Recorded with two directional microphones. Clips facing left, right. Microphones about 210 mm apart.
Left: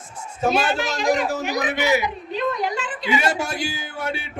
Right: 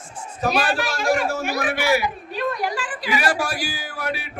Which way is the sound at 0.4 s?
25° left (ahead or behind).